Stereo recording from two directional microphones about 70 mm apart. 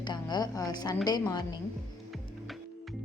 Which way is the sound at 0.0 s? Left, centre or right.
Left.